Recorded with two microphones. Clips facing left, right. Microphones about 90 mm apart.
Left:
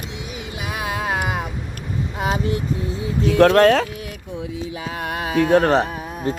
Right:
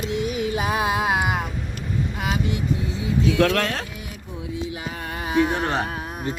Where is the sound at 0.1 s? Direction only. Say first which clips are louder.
Right 8 dB; 50° right (ahead or behind).